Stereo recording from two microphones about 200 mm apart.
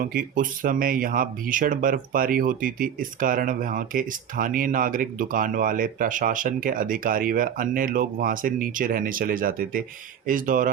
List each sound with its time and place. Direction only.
0.0 s speech: 45° right (ahead or behind)